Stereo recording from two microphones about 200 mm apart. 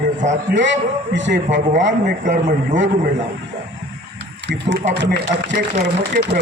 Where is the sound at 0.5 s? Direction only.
65° right (ahead or behind).